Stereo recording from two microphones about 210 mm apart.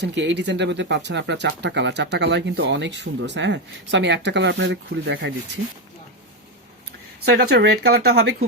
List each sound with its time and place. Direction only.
0.0 s speech: 60° right (ahead or behind)
7.3 s speech: 50° right (ahead or behind)